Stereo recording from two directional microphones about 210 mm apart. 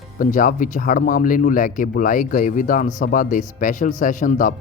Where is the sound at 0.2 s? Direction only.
40° left (ahead or behind).